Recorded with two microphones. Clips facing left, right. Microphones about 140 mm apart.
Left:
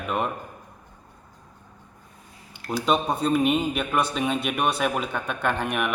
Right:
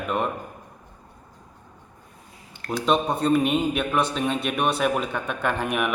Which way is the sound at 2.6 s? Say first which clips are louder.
Right 1 dB; 5° left (ahead or behind).